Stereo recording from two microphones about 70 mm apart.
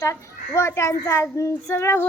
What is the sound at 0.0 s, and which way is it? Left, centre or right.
Speech, left.